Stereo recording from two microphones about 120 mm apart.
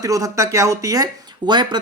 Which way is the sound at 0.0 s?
30° right (ahead or behind).